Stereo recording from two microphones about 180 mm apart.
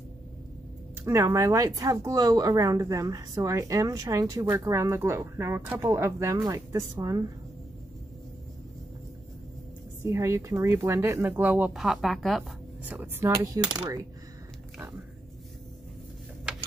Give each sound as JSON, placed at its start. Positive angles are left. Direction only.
{"t": 1.0, "sound": "speech", "side_deg": -15}
{"t": 10.0, "sound": "speech", "side_deg": -15}
{"t": 13.3, "sound": "speech", "side_deg": -20}